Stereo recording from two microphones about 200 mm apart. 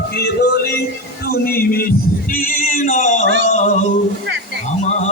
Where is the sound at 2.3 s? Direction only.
45° left (ahead or behind).